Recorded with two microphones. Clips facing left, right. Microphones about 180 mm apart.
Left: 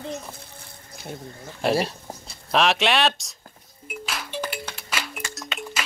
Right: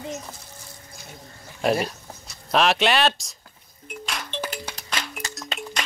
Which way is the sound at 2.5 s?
Centre (ahead or behind).